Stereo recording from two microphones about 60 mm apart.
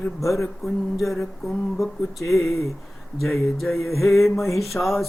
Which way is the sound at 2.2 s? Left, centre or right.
Left.